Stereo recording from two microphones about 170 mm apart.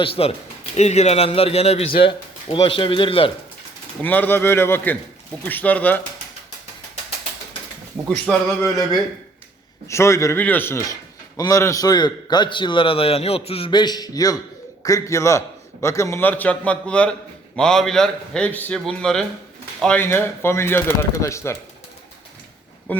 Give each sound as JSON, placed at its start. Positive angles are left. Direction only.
{"t": 0.0, "sound": "speech", "side_deg": 35}
{"t": 4.0, "sound": "a man's voice", "side_deg": 10}
{"t": 8.6, "sound": "a man's voice", "side_deg": 20}
{"t": 22.9, "sound": "a man's voice", "side_deg": 10}